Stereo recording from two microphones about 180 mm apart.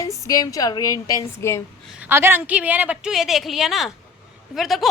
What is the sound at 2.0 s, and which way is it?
A woman's voice, 10° right (ahead or behind).